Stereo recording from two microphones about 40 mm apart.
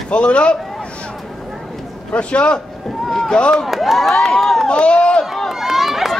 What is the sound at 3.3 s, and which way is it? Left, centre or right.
Speech, left.